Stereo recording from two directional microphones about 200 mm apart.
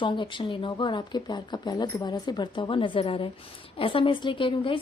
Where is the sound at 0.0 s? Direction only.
25° left (ahead or behind).